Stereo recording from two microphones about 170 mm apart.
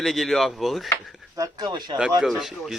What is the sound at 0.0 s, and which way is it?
Speech, centre (ahead or behind).